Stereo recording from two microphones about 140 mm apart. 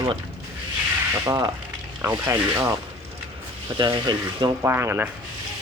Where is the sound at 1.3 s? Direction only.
25° right (ahead or behind).